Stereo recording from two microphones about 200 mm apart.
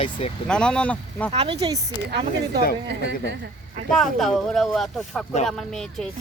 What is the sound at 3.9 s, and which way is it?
Speech, centre (ahead or behind).